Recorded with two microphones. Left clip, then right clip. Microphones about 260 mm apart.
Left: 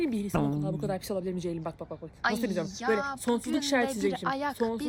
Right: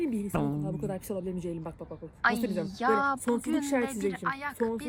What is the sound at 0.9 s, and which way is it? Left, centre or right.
Speech, centre.